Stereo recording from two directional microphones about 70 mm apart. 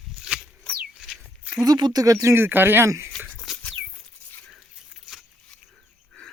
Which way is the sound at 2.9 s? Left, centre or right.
Right.